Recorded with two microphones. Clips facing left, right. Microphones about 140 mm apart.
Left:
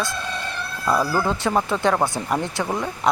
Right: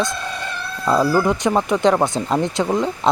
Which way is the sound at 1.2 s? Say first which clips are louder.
Right 3 dB; 15° right (ahead or behind).